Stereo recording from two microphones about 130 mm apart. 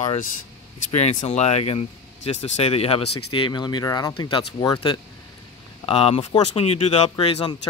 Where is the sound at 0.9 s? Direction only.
55° left (ahead or behind); by 4.4 s 35° left (ahead or behind).